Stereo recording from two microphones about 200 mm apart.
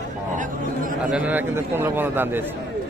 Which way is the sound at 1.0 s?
5° right (ahead or behind).